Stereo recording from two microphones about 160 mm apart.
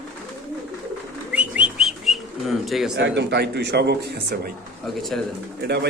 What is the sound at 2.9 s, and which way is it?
Speech, 90° right.